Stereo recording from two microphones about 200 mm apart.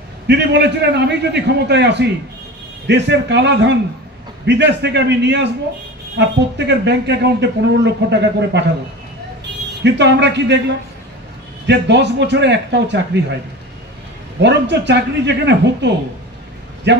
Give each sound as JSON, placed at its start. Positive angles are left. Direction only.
{"t": 0.3, "sound": "a man's voice", "side_deg": -60}
{"t": 11.6, "sound": "speech", "side_deg": -60}
{"t": 14.4, "sound": "speech", "side_deg": -60}